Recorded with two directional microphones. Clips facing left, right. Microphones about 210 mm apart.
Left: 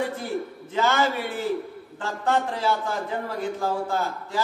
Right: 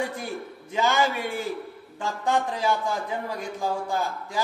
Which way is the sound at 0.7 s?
15° right (ahead or behind).